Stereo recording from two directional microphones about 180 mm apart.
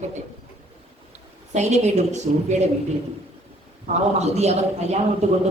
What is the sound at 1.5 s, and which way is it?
A woman's voice, 40° right (ahead or behind).